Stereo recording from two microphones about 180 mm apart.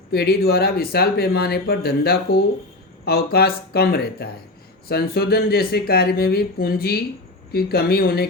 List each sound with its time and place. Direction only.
0.1 s speech: 60° left (ahead or behind)